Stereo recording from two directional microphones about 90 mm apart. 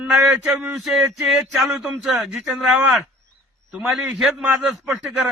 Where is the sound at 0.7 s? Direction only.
Centre (ahead or behind).